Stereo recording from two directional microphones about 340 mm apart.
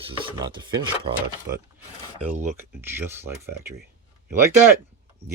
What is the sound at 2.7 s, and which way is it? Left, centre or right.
Speech, centre.